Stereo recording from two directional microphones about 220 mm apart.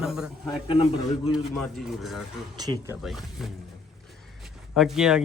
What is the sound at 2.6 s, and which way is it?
Speech, 15° right (ahead or behind).